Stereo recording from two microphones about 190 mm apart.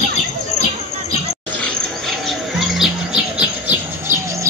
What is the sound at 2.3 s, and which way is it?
Music, centre (ahead or behind).